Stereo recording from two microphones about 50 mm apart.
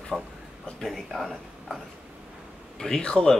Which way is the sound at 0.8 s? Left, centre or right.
Centre.